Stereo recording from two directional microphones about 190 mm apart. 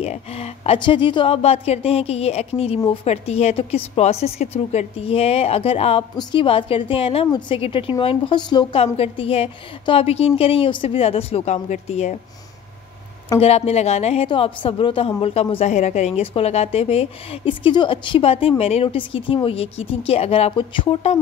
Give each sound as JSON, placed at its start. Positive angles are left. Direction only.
{"t": 0.0, "sound": "a woman's voice", "side_deg": 35}
{"t": 13.4, "sound": "a woman's voice", "side_deg": 35}